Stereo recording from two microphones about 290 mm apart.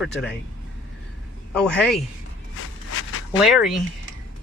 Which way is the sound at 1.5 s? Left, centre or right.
Centre.